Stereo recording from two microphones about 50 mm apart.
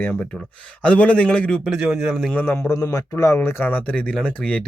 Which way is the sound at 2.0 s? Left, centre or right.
Centre.